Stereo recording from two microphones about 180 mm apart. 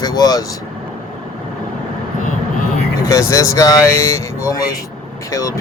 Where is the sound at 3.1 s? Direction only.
20° left (ahead or behind).